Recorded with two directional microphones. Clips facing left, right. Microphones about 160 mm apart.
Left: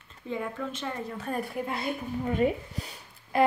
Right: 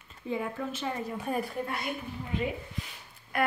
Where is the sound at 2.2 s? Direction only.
45° left (ahead or behind).